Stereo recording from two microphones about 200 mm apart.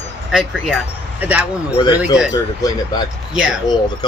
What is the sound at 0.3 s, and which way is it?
Speech, 5° right (ahead or behind).